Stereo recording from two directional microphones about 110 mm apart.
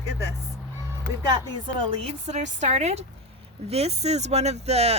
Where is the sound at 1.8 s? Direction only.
75° right (ahead or behind).